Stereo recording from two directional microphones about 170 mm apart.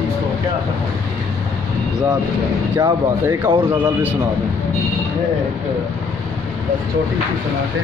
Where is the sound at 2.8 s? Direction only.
20° right (ahead or behind).